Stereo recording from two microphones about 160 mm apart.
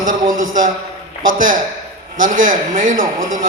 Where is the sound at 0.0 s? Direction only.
55° right (ahead or behind).